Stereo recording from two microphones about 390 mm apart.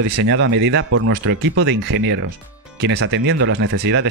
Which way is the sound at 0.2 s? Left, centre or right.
Right.